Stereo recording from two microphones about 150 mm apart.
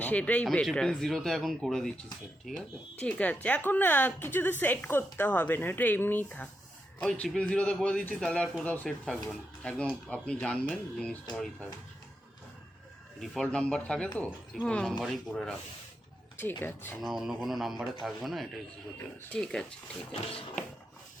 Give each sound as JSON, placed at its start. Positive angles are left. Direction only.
{"t": 0.0, "sound": "a woman's voice", "side_deg": 10}
{"t": 13.1, "sound": "a woman's voice", "side_deg": 5}
{"t": 16.4, "sound": "a woman's voice", "side_deg": 15}
{"t": 17.0, "sound": "speech", "side_deg": 0}